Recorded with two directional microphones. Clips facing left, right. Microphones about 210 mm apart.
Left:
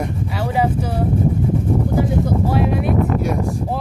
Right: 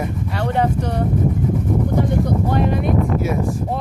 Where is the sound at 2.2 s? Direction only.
5° left (ahead or behind).